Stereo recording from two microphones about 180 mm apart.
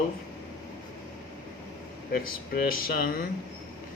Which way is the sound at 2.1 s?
55° left (ahead or behind).